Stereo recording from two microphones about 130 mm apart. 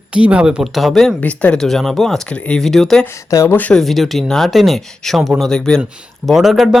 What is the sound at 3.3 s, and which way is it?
Speech, 20° left (ahead or behind).